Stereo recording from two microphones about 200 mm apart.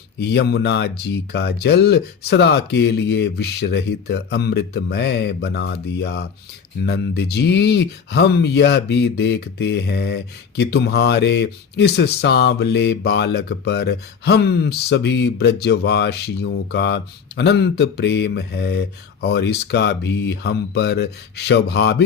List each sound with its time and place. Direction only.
0.2 s speech: 55° left (ahead or behind)